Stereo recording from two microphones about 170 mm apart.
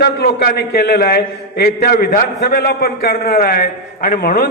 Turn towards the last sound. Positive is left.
turn(degrees=65)  # may be behind; listen again after turning